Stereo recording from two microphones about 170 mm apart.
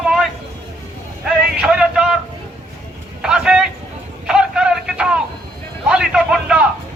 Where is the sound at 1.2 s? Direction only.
5° right (ahead or behind).